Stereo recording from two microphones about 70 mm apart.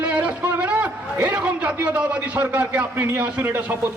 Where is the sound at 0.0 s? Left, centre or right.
Centre.